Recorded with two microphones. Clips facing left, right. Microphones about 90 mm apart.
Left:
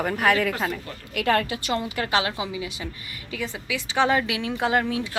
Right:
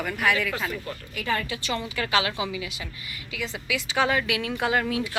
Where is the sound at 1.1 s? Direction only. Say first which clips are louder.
Left 6 dB; 65° left (ahead or behind).